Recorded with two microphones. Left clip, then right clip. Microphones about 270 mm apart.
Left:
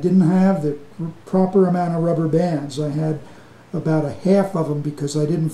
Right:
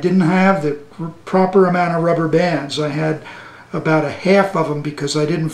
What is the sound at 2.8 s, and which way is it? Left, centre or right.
Speech, centre.